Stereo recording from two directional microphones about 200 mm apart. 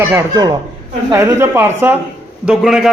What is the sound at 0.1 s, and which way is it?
A man's voice, 15° right (ahead or behind).